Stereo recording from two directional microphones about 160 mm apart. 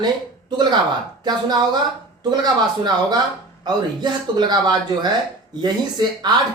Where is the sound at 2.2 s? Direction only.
25° right (ahead or behind).